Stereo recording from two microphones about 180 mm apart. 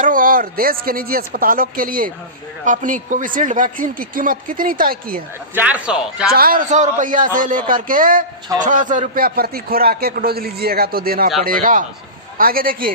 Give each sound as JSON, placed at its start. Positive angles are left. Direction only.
{"t": 0.0, "sound": "speech", "side_deg": -50}
{"t": 5.5, "sound": "speech", "side_deg": -10}
{"t": 6.3, "sound": "a man's voice", "side_deg": -55}